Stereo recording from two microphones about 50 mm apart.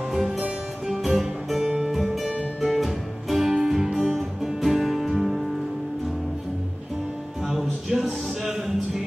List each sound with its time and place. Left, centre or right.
0.1 s music: centre
0.4 s music: centre
1.0 s music: centre
7.4 s music: centre